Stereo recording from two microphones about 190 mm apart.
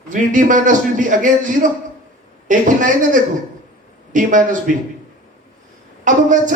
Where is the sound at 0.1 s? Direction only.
45° right (ahead or behind).